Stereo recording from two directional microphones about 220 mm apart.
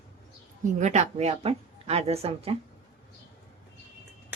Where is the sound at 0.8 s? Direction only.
30° right (ahead or behind).